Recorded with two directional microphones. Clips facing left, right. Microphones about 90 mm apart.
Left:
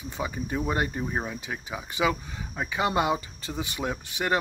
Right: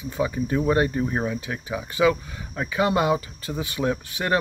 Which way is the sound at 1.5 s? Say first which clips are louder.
Right 5 dB; 20° left (ahead or behind).